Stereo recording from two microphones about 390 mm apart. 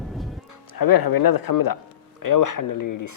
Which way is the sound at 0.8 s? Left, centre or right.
Left.